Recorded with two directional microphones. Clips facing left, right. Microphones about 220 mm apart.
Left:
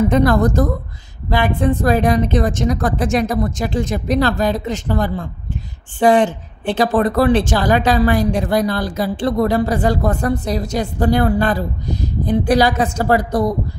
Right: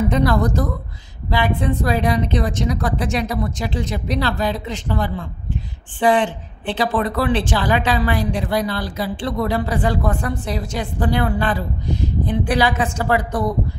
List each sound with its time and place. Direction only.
0.1 s a woman's voice: 50° left (ahead or behind)